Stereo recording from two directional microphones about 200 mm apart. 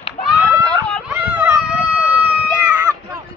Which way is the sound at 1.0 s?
5° right (ahead or behind).